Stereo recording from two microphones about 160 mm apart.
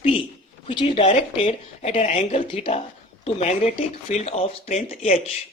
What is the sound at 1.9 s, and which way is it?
Speech, 50° left (ahead or behind).